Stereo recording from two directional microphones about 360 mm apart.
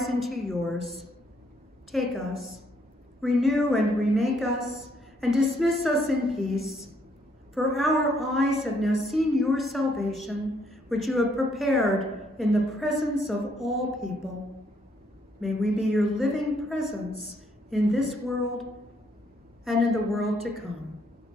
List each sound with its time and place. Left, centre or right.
0.0 s a sound: centre
1.9 s a woman's voice: centre
15.4 s a woman's voice: centre